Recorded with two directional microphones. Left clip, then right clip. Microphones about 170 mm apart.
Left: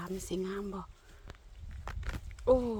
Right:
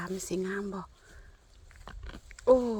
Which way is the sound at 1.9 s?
5° left (ahead or behind).